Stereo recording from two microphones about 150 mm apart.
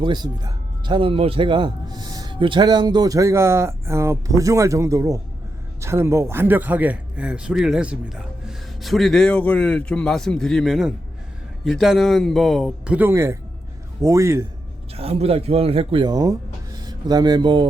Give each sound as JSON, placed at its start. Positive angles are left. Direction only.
{"t": 0.0, "sound": "a man's voice", "side_deg": -30}
{"t": 14.9, "sound": "speech", "side_deg": -40}